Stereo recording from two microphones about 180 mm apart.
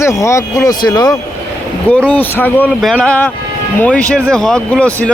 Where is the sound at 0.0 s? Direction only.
15° left (ahead or behind).